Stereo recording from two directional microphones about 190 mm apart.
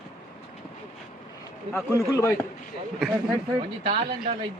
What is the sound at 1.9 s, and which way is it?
Speech, 15° left (ahead or behind).